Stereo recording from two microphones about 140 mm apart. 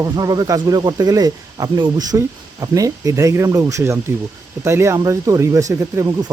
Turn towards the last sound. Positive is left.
turn(degrees=-20)  # may be behind; listen again after turning